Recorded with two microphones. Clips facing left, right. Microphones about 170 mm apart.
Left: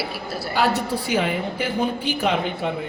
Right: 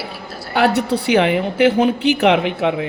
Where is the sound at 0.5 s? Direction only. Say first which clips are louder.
Right 6 dB; 65° right (ahead or behind); by 2.9 s 85° right.